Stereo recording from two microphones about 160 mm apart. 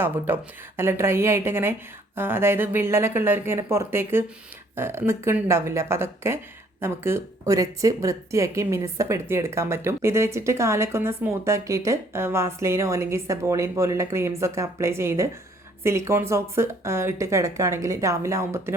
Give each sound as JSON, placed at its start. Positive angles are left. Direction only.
{"t": 0.3, "sound": "speech", "side_deg": -15}